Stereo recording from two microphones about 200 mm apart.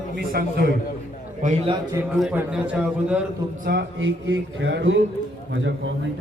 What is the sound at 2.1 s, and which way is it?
A man's voice, 5° right (ahead or behind).